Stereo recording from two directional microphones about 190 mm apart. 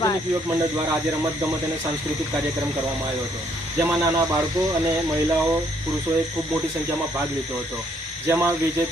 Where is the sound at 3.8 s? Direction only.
10° right (ahead or behind).